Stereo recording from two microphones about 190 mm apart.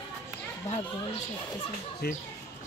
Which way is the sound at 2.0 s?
55° left (ahead or behind).